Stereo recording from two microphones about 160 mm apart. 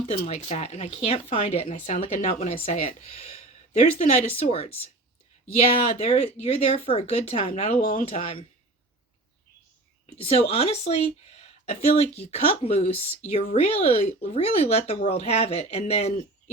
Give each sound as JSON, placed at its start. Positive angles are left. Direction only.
{"t": 0.0, "sound": "speech", "side_deg": 35}
{"t": 3.7, "sound": "speech", "side_deg": 55}
{"t": 4.4, "sound": "speech", "side_deg": 40}
{"t": 6.0, "sound": "speech", "side_deg": 40}
{"t": 10.2, "sound": "speech", "side_deg": 35}